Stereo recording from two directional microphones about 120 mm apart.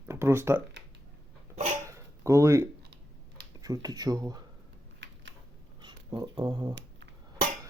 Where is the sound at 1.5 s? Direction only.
75° right (ahead or behind).